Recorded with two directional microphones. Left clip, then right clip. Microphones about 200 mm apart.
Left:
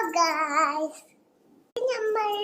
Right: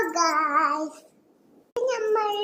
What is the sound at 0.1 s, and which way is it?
Child singing, 10° left (ahead or behind).